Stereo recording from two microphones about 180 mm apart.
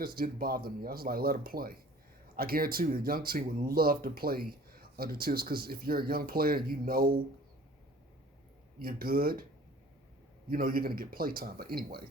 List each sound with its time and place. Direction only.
0.2 s speech: 55° right (ahead or behind)
8.8 s speech: 55° right (ahead or behind)
10.5 s speech: 55° right (ahead or behind)